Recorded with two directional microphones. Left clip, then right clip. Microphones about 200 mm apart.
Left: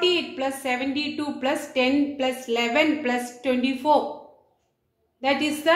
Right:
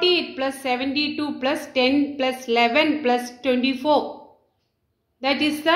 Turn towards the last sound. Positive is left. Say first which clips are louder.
# right 2 dB
turn(degrees=-35)  # may be behind; listen again after turning